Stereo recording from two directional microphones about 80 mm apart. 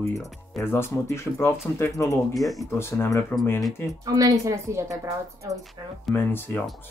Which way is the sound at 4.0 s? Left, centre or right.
Right.